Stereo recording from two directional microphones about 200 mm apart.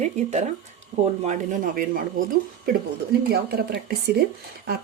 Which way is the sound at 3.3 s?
50° right (ahead or behind).